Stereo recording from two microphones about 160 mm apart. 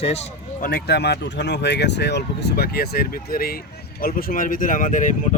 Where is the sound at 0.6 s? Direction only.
80° left.